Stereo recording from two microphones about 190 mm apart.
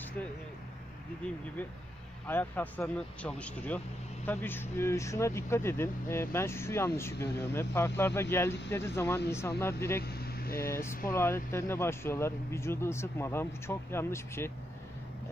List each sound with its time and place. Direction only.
2.2 s speech: 10° left (ahead or behind)
10.0 s vehicle: 55° left (ahead or behind)
10.7 s speech: 15° left (ahead or behind)